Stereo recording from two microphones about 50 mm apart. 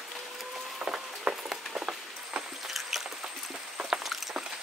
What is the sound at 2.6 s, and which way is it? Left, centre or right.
Rodents, centre.